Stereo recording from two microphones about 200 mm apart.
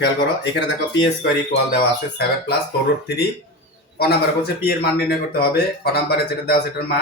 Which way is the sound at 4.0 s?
50° left (ahead or behind).